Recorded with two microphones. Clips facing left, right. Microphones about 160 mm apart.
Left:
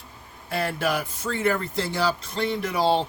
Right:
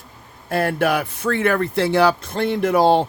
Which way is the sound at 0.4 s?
55° right (ahead or behind).